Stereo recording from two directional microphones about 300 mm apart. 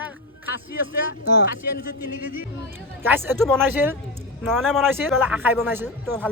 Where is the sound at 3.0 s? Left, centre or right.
Centre.